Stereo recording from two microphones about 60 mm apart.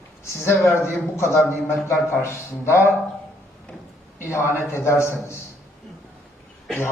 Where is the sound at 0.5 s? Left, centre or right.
Left.